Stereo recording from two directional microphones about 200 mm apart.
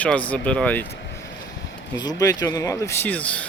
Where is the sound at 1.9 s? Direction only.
20° left (ahead or behind).